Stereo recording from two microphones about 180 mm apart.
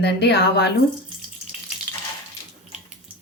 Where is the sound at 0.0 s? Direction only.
65° left (ahead or behind).